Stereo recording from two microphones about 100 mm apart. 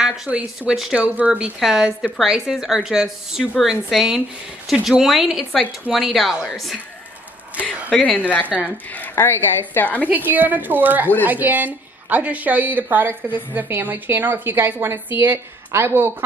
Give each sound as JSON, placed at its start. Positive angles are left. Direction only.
{"t": 0.0, "sound": "a sound", "side_deg": -5}
{"t": 0.3, "sound": "speech", "side_deg": -15}
{"t": 8.5, "sound": "speech", "side_deg": -10}
{"t": 9.1, "sound": "a woman's voice", "side_deg": 25}
{"t": 10.0, "sound": "a woman's voice", "side_deg": -15}